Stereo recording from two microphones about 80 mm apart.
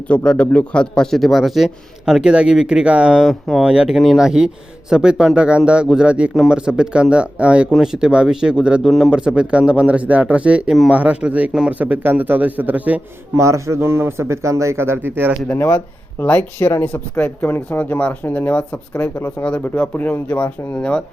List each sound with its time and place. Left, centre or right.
0.3 s a man's voice: centre
3.2 s a man's voice: centre
3.6 s speech: centre
3.9 s speech: centre
8.8 s a man's voice: centre
13.3 s speech: right
15.4 s speech: left
16.1 s speech: centre
19.1 s speech: left
19.5 s speech: centre